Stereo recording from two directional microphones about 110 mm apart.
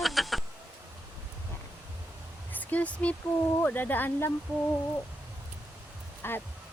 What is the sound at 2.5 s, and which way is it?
Speech, 15° left (ahead or behind).